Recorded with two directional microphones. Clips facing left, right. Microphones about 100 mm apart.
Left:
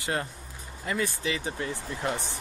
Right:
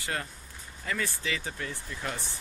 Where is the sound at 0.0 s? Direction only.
25° left (ahead or behind).